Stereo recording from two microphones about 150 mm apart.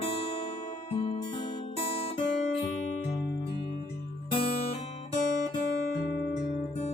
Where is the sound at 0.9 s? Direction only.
40° left (ahead or behind).